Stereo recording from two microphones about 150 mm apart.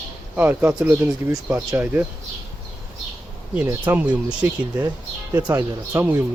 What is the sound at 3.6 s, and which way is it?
Speech, 10° right (ahead or behind).